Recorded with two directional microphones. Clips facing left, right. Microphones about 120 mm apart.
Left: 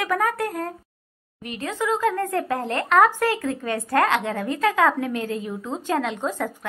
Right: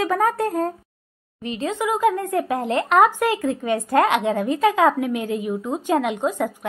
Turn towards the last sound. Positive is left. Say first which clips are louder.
# right 4 dB
turn(degrees=-15)  # may be behind; listen again after turning